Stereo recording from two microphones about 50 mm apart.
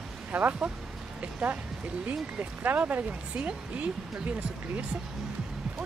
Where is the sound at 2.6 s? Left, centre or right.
Right.